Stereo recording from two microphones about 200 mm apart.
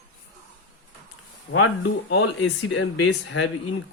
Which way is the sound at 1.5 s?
90° left.